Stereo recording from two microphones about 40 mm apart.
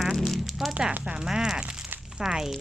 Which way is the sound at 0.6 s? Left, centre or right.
Centre.